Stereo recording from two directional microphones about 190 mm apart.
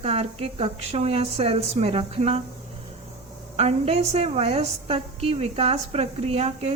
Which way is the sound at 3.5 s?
35° right (ahead or behind).